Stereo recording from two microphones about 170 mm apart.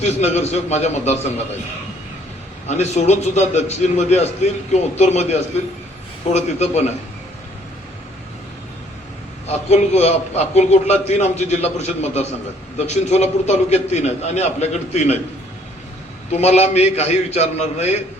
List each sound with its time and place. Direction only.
0.0 s a man's voice: 40° left (ahead or behind)
2.6 s a man's voice: 40° left (ahead or behind)
9.5 s a man's voice: 40° left (ahead or behind)
16.3 s a man's voice: 40° left (ahead or behind)